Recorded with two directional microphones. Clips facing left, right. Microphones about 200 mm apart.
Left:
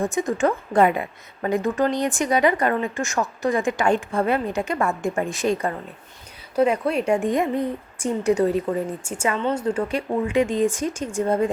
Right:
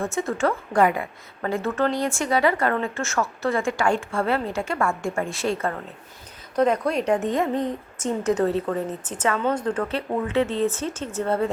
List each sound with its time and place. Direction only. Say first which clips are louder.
0.0 s a woman's voice: left 2 dB; 15° left (ahead or behind)